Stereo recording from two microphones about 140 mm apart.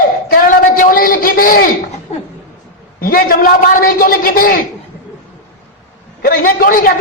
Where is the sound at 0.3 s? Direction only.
85° left.